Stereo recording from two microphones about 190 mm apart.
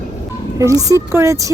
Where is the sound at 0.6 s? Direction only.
15° right (ahead or behind).